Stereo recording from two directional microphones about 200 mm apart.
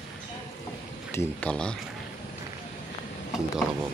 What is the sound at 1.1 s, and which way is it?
Speech, 5° left (ahead or behind).